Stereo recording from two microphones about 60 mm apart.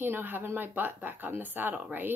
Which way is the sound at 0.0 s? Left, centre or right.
Right.